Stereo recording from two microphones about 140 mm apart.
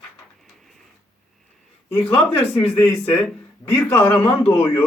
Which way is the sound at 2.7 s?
20° left (ahead or behind).